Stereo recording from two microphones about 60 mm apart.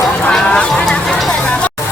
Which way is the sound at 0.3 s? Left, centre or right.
Centre.